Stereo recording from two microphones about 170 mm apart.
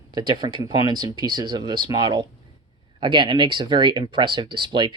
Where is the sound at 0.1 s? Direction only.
25° right (ahead or behind).